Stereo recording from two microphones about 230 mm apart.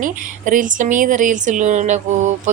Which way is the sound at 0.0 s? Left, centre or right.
Right.